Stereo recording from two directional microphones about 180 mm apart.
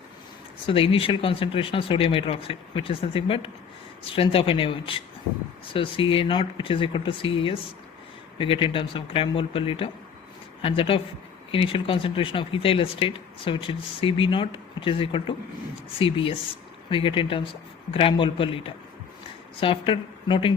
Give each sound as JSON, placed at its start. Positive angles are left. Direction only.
{"t": 0.7, "sound": "speech", "side_deg": 30}